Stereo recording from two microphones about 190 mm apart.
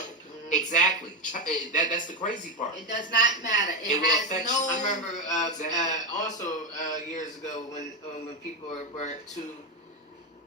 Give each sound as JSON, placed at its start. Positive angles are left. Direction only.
{"t": 0.5, "sound": "a man's voice", "side_deg": 40}